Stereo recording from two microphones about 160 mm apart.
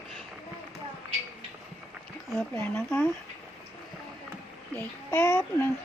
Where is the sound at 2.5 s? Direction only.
15° left (ahead or behind).